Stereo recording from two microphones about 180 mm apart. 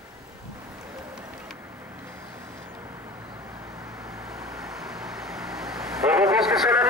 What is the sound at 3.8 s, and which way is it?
Vehicle, 15° right (ahead or behind).